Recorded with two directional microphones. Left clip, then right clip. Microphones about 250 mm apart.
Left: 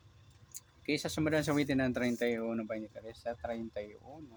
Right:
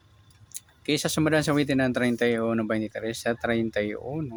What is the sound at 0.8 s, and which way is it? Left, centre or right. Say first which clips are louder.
Speech: right 9 dB; centre.